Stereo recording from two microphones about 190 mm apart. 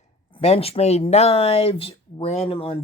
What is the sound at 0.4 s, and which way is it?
Speech, 30° left (ahead or behind).